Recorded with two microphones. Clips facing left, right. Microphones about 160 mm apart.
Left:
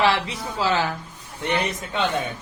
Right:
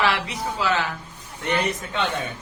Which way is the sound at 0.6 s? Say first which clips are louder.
Left 2 dB; 30° left (ahead or behind).